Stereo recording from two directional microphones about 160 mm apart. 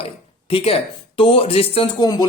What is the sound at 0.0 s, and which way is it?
Speech, 35° left (ahead or behind).